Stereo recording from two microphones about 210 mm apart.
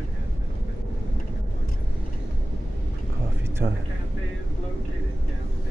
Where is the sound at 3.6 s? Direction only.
35° right (ahead or behind).